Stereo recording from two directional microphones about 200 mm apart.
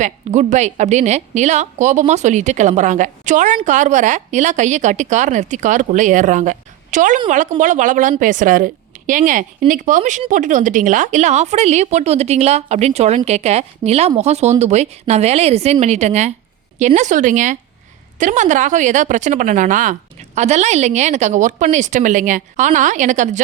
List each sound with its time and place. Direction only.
0.0 s a woman's voice: 35° right (ahead or behind)